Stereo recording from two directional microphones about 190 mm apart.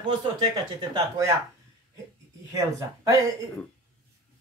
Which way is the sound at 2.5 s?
15° right (ahead or behind).